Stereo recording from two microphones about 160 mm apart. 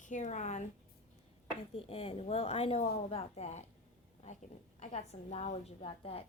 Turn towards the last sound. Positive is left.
turn(degrees=35)  # may be behind; listen again after turning